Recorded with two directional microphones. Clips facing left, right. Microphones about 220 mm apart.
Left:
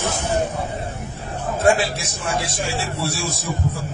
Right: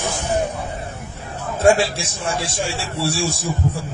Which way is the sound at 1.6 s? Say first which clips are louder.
Right 3 dB; 25° right (ahead or behind).